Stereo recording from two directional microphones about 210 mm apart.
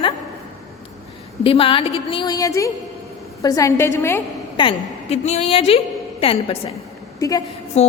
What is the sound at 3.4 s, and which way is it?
Speech, 15° left (ahead or behind).